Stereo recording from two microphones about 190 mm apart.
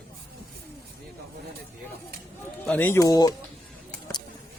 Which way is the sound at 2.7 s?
10° left (ahead or behind).